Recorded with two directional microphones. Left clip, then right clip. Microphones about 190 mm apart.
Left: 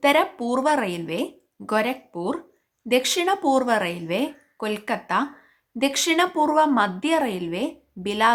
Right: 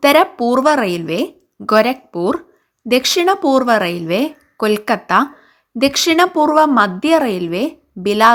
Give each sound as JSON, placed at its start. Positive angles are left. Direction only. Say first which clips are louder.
{"t": 0.0, "sound": "a woman's voice", "louder": "right 8 dB", "side_deg": -25}